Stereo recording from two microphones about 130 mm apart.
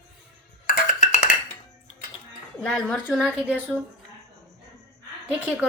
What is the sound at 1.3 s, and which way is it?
Dishes, 90° left.